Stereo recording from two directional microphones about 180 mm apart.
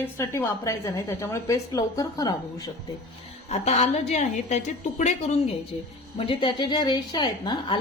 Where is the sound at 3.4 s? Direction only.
35° left (ahead or behind).